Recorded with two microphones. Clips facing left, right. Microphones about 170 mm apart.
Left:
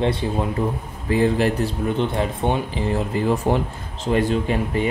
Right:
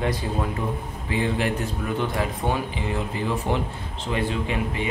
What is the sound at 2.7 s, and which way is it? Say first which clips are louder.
Speech: left 5 dB; 40° left (ahead or behind).